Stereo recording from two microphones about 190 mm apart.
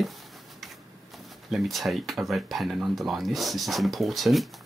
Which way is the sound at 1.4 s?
Centre (ahead or behind).